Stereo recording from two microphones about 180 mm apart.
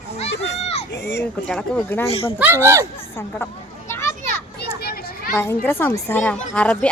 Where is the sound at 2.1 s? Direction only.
30° left (ahead or behind).